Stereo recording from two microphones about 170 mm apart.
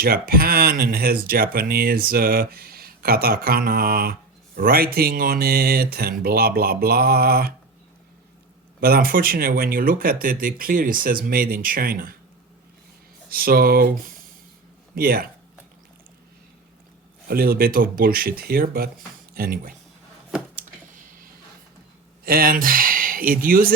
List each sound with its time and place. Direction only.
0.0 s speech: 60° right (ahead or behind)
8.8 s speech: 60° right (ahead or behind)
13.3 s speech: 60° right (ahead or behind)
14.9 s speech: 60° right (ahead or behind)
17.2 s speech: 60° right (ahead or behind)
20.9 s squish: 55° right (ahead or behind)
22.2 s speech: 60° right (ahead or behind)